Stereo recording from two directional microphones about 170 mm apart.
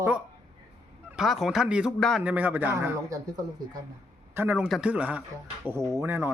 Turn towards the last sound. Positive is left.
turn(degrees=-15)  # may be behind; listen again after turning